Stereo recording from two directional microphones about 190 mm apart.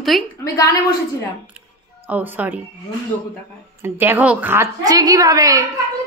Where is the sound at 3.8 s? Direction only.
10° right (ahead or behind).